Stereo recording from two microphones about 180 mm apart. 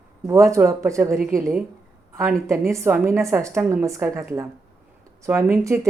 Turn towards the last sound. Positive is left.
turn(degrees=-15)  # may be behind; listen again after turning